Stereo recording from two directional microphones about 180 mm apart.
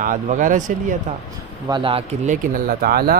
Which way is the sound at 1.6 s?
25° right (ahead or behind).